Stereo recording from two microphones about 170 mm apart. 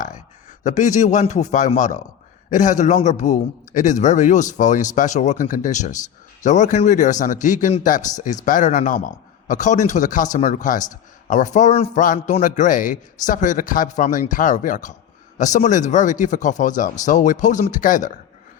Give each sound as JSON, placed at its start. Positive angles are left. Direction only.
{"t": 0.6, "sound": "a man's voice", "side_deg": 45}